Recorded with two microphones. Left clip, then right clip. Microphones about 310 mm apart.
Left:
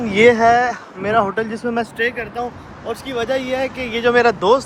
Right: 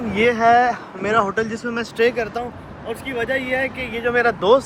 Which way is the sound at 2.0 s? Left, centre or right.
Centre.